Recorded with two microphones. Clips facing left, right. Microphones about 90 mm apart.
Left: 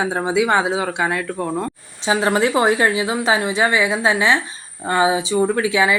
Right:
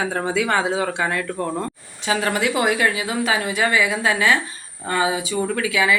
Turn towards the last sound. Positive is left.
turn(degrees=25)  # may be behind; listen again after turning